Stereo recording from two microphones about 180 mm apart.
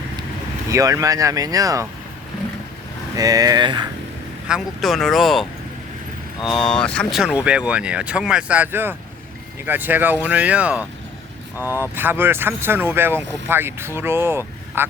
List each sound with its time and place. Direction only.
0.7 s speech: 20° right (ahead or behind)
3.2 s speech: 20° right (ahead or behind)
4.4 s speech: centre (ahead or behind)
6.4 s speech: 25° left (ahead or behind)
6.7 s speech: 5° left (ahead or behind); by 14.8 s 15° right (ahead or behind)